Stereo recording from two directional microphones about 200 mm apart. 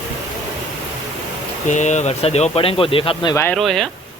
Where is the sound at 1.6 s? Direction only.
35° left (ahead or behind).